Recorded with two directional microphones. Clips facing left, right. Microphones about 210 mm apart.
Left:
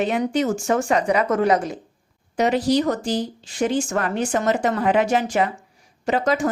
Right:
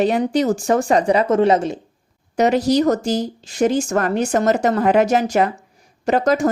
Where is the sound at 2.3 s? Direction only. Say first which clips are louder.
Right 3 dB; 40° right (ahead or behind).